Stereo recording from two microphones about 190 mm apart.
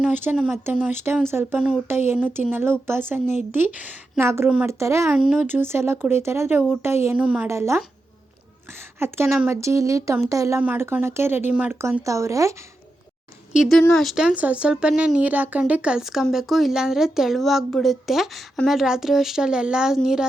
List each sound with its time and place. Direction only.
0.0 s speech: 10° right (ahead or behind)
4.2 s speech: 15° right (ahead or behind)
5.2 s speech: 5° right (ahead or behind)
9.0 s speech: 15° right (ahead or behind)
13.6 s speech: centre (ahead or behind)